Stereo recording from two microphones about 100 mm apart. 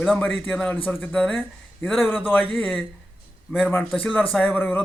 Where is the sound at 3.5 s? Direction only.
15° left (ahead or behind).